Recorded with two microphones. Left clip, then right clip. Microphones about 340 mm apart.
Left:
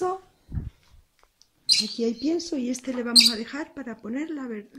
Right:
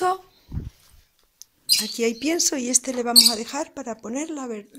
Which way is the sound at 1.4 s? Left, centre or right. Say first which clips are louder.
Right 15 dB; right.